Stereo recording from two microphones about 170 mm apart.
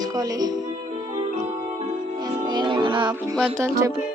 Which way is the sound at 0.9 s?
40° right (ahead or behind).